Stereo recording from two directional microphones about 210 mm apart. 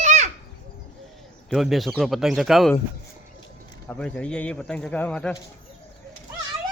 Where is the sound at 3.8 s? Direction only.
5° left (ahead or behind).